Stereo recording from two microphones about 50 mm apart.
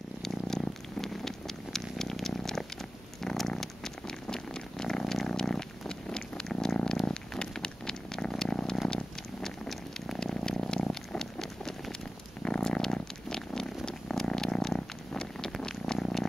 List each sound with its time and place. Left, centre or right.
0.2 s purr: centre
3.2 s cat: centre
7.1 s a sound: centre
9.7 s purr: centre